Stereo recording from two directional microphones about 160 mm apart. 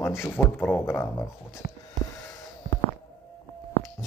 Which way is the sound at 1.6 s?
90° left.